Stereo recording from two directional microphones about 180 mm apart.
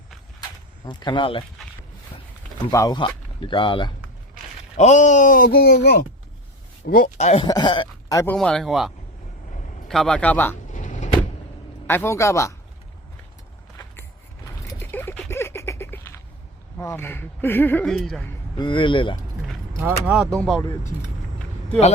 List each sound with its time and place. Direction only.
0.9 s speech: 25° left (ahead or behind)
2.6 s speech: 20° left (ahead or behind)
4.8 s speech: 40° left (ahead or behind)
7.3 s speech: 30° left (ahead or behind)
8.4 s speech: 5° left (ahead or behind)
9.9 s speech: 5° left (ahead or behind)
10.7 s vehicle: 45° left (ahead or behind)
11.9 s speech: 15° left (ahead or behind)
14.4 s a sound: 15° left (ahead or behind)
16.7 s speech: 15° left (ahead or behind)
18.6 s speech: 25° left (ahead or behind)
19.8 s speech: 5° right (ahead or behind)
20.3 s speech: 5° left (ahead or behind)